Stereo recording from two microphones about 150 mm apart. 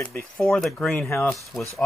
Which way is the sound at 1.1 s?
20° left (ahead or behind).